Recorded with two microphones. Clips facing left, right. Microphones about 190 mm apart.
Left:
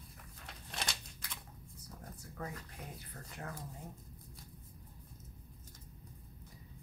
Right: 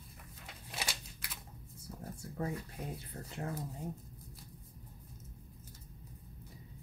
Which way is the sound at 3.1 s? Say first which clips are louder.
Right 5 dB; 25° right (ahead or behind).